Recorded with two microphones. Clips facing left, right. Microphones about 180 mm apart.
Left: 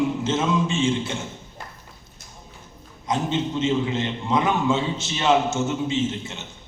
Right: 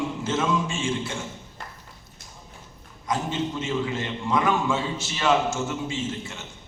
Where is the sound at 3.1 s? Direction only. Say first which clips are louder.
Left 3 dB; 20° left (ahead or behind).